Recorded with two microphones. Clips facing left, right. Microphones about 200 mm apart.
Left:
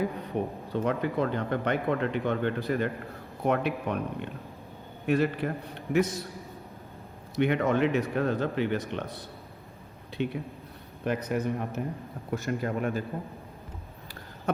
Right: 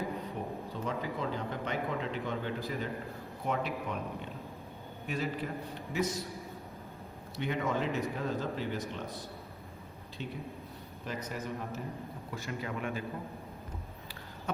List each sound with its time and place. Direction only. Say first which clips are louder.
0.4 s a sound: left 14 dB; 65° left (ahead or behind)
0.7 s speech: left 10 dB; 65° left (ahead or behind)
7.4 s speech: left 7 dB; 65° left (ahead or behind)
12.3 s a man's voice: left 9 dB; 50° left (ahead or behind)